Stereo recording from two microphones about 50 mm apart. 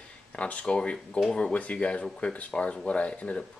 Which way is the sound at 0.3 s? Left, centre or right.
Left.